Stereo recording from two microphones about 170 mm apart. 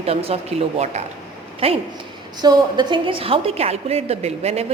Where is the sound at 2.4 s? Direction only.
25° right (ahead or behind).